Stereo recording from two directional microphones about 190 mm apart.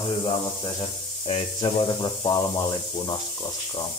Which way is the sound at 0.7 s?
25° left (ahead or behind).